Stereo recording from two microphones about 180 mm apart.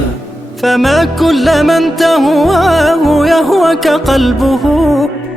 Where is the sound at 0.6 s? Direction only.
Centre (ahead or behind).